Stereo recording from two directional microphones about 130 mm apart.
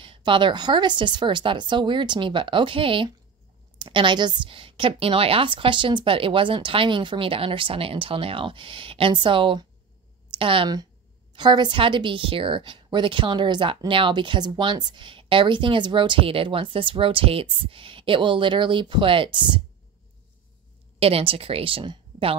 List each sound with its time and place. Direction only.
0.0 s speech: 40° right (ahead or behind)
21.0 s a woman's voice: 45° right (ahead or behind)